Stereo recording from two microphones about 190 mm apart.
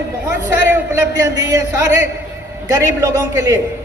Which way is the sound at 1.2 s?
15° right (ahead or behind).